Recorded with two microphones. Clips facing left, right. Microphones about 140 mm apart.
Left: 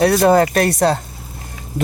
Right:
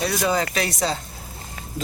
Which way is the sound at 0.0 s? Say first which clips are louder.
Left 10 dB; 60° left (ahead or behind).